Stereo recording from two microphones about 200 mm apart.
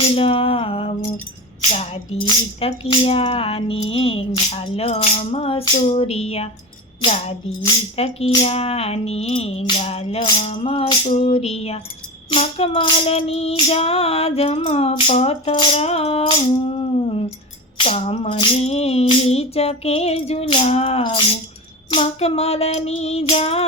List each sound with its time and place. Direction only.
0.2 s music: 30° left (ahead or behind)